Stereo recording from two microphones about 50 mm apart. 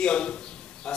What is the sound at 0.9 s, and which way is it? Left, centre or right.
Snake, centre.